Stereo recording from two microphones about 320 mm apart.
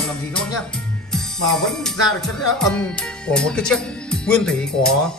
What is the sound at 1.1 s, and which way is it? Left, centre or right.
Music, centre.